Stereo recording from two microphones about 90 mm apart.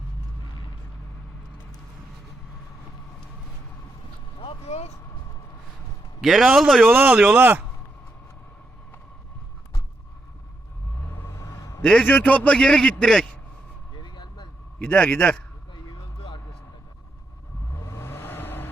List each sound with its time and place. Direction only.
6.2 s a man's voice: 5° right (ahead or behind)
6.8 s speech: 20° right (ahead or behind)
11.0 s a sound: 30° left (ahead or behind)
11.8 s a man's voice: 10° left (ahead or behind)
12.0 s a man's voice: 20° left (ahead or behind)
14.0 s vehicle: 55° left (ahead or behind)
14.8 s a man's voice: 10° left (ahead or behind)
15.7 s a sound: 60° left (ahead or behind)
17.7 s vehicle: 35° left (ahead or behind)